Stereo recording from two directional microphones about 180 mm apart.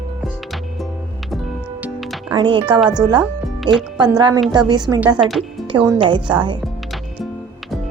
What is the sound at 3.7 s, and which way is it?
Speech, 25° right (ahead or behind).